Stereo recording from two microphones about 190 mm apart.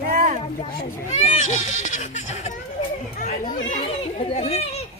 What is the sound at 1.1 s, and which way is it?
A child's voice, 35° left (ahead or behind).